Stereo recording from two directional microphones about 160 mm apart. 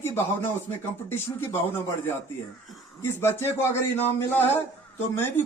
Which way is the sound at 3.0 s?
15° left (ahead or behind).